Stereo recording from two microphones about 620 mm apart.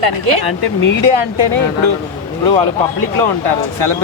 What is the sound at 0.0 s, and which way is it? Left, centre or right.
Speech, right.